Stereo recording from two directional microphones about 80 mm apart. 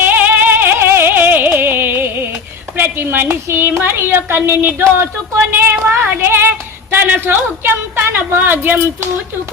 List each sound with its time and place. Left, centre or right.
0.0 s music: right
2.7 s a woman's voice: right
5.5 s a sound: right
7.0 s a woman's voice: right